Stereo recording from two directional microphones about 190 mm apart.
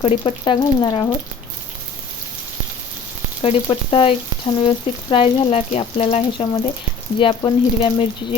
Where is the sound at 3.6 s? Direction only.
30° left (ahead or behind).